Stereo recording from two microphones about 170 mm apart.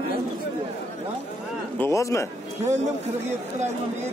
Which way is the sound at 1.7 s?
15° left (ahead or behind).